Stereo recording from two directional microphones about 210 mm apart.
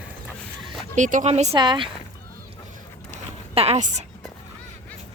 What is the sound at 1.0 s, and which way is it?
Speech, 35° right (ahead or behind).